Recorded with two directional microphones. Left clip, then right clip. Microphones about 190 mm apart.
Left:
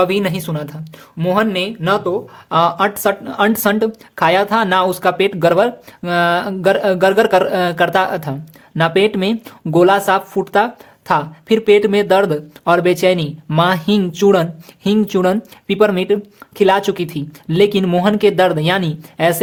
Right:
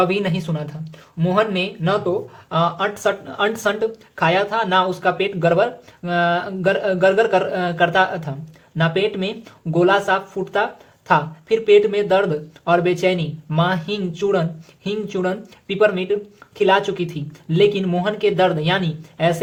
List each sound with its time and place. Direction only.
0.0 s speech: 35° left (ahead or behind)